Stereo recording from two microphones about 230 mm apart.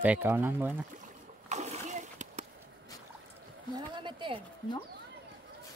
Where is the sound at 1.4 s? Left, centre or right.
Right.